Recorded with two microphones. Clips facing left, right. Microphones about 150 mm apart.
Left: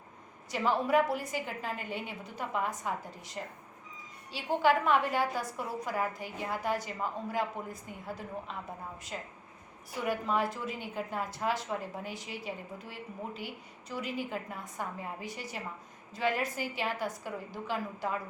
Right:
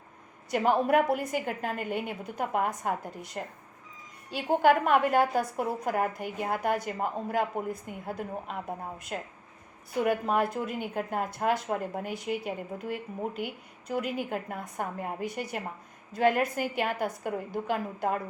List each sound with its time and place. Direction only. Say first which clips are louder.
0.5 s a woman's voice: right 4 dB; 55° right (ahead or behind)